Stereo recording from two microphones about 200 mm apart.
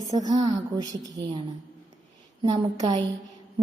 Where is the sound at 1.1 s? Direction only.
20° right (ahead or behind).